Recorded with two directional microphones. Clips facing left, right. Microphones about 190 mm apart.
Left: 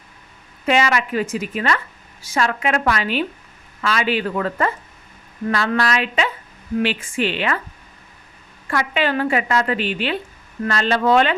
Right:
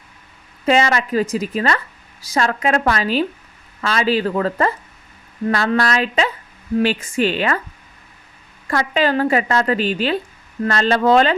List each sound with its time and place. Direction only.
0.6 s a woman's voice: 35° right (ahead or behind)
8.7 s a woman's voice: 40° right (ahead or behind)